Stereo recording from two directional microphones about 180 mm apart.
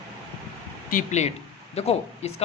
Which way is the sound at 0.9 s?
45° left (ahead or behind).